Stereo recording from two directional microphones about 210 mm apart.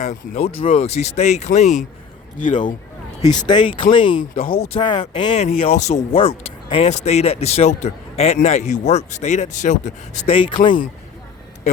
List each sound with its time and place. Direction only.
0.0 s speech: 30° left (ahead or behind)
3.2 s speech: 20° left (ahead or behind)
4.2 s speech: 40° left (ahead or behind)
4.7 s speech: 25° left (ahead or behind)